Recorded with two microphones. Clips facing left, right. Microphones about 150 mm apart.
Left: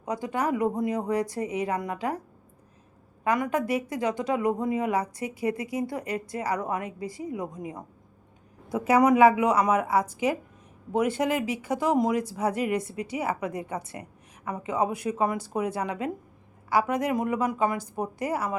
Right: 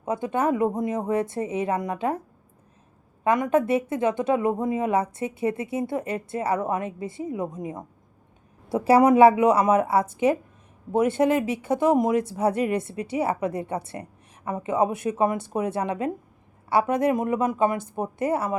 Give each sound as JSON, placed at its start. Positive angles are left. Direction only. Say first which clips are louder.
{"t": 0.0, "sound": "speech", "louder": "right 4 dB", "side_deg": -25}
{"t": 3.2, "sound": "speech", "louder": "right 5 dB", "side_deg": -20}